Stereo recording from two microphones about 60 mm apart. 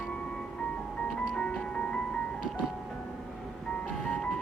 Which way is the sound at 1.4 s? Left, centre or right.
Centre.